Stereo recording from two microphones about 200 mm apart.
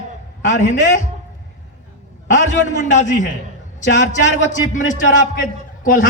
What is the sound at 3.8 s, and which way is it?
Speech, 65° left (ahead or behind).